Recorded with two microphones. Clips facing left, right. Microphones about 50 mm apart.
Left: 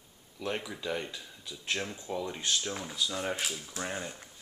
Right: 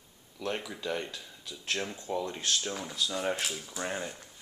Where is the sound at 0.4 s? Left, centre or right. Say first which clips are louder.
Even; centre.